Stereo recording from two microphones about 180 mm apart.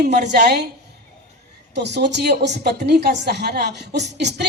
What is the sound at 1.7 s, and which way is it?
A woman's voice, 70° right (ahead or behind).